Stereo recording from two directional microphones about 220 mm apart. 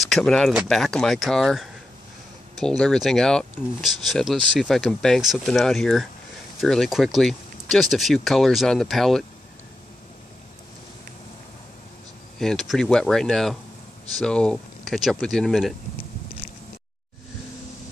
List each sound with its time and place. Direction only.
0.0 s speech: centre (ahead or behind)
12.4 s speech: centre (ahead or behind)
16.4 s a sound: 40° left (ahead or behind)